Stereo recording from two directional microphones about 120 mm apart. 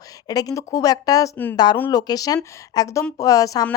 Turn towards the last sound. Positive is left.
turn(degrees=30)  # may be behind; listen again after turning